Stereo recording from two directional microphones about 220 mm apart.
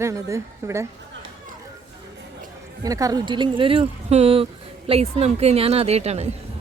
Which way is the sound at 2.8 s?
15° right (ahead or behind).